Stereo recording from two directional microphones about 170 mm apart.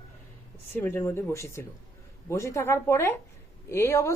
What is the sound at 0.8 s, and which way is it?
Speech, 10° left (ahead or behind).